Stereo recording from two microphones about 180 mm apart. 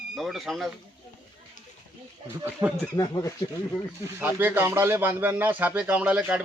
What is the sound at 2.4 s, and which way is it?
Speech, 10° right (ahead or behind).